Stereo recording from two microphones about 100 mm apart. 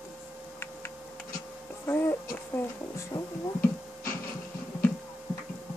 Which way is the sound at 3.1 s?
40° left (ahead or behind).